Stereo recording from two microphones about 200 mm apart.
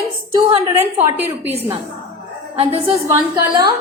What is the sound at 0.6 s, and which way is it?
Speech, 10° right (ahead or behind).